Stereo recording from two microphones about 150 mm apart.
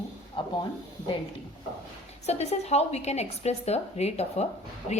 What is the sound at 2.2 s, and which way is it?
A woman's voice, 45° left (ahead or behind).